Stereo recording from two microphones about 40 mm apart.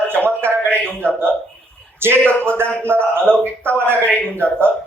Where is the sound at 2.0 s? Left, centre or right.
Right.